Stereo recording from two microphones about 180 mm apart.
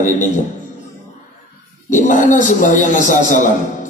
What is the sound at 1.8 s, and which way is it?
A man's voice, 45° left (ahead or behind).